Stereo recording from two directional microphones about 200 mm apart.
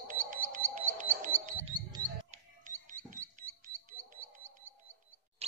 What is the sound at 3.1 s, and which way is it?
Rodents, 40° right (ahead or behind).